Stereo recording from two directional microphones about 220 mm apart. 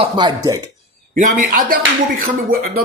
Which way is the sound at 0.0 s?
20° right (ahead or behind).